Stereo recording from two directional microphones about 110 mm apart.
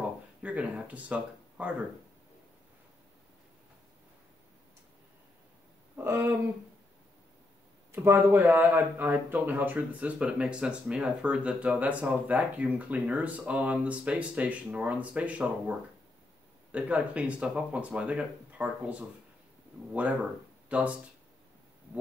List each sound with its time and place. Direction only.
0.4 s speech: 15° right (ahead or behind)
5.9 s speech: 20° right (ahead or behind)
7.9 s speech: 25° right (ahead or behind)
16.7 s speech: 10° right (ahead or behind)